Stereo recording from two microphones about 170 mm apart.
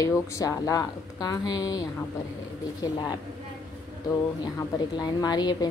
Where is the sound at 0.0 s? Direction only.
20° left (ahead or behind).